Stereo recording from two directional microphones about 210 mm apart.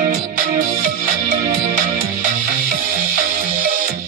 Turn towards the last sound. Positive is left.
turn(degrees=-40)  # may be behind; listen again after turning